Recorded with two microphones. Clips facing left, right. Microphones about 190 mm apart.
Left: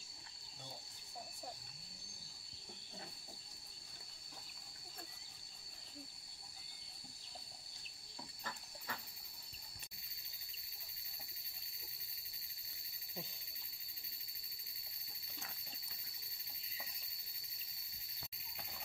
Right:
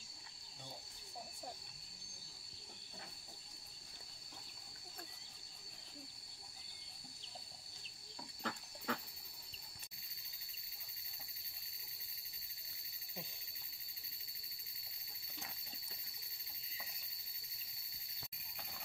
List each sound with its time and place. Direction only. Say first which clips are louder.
8.4 s pig: right 8 dB; 75° right (ahead or behind)